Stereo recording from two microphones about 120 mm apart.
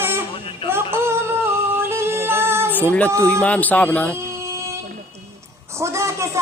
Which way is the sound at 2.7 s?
15° left (ahead or behind).